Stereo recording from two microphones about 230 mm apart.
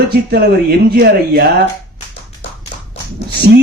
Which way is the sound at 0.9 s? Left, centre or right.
Right.